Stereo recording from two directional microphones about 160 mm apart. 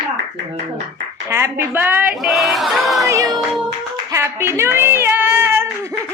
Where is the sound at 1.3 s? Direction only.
15° right (ahead or behind).